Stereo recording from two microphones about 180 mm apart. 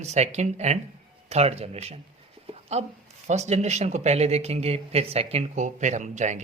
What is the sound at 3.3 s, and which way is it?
Speech, 40° right (ahead or behind).